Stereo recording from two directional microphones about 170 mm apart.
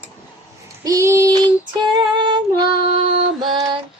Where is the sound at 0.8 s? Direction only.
20° right (ahead or behind).